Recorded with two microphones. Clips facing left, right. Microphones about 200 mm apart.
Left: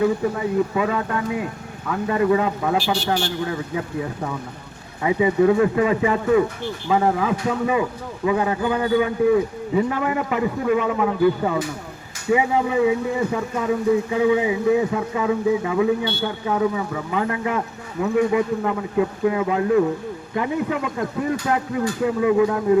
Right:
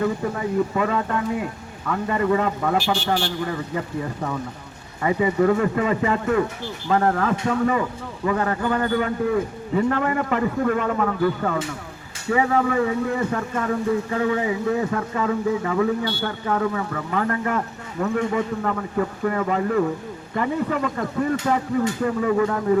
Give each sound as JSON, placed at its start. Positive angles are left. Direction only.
{"t": 0.0, "sound": "a man's voice", "side_deg": 5}